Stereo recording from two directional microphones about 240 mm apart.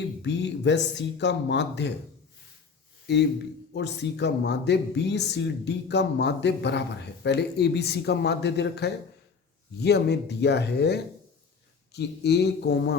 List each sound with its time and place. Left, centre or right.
0.2 s speech: left
3.8 s speech: left